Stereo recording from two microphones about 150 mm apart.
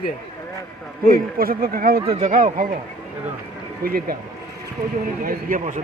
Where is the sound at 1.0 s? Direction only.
75° right (ahead or behind).